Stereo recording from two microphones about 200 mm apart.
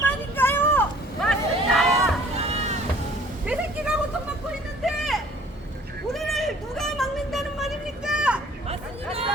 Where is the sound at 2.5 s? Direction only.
30° right (ahead or behind).